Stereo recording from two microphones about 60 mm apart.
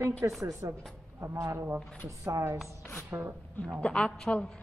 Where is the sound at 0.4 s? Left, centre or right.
Right.